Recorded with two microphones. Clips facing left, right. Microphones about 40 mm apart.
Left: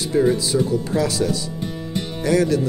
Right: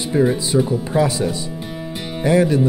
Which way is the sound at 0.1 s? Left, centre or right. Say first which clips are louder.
Right 1 dB; centre.